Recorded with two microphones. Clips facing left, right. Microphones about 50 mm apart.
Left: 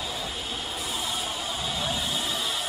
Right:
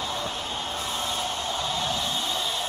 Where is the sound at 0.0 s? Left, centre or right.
Right.